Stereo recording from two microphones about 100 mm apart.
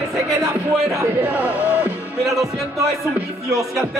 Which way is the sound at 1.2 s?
15° right (ahead or behind).